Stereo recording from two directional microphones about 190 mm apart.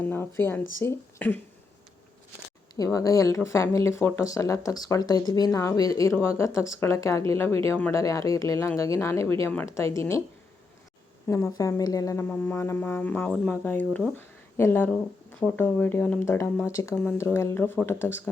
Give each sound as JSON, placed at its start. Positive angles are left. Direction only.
{"t": 0.0, "sound": "speech", "side_deg": 10}
{"t": 2.7, "sound": "speech", "side_deg": 20}
{"t": 11.3, "sound": "speech", "side_deg": 15}